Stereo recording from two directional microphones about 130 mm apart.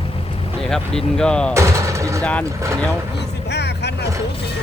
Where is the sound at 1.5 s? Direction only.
20° right (ahead or behind).